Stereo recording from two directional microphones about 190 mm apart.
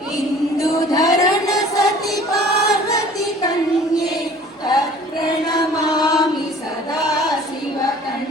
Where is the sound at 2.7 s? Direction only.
20° left (ahead or behind).